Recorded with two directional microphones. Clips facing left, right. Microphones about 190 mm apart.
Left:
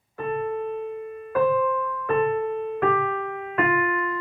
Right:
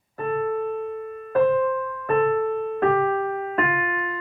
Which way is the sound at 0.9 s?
50° right (ahead or behind).